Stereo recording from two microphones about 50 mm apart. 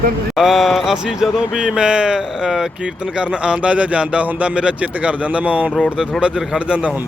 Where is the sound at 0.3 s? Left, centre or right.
Centre.